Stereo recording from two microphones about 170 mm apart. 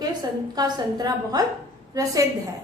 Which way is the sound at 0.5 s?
25° right (ahead or behind).